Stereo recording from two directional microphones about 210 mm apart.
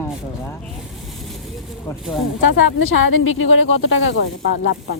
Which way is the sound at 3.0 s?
70° left (ahead or behind).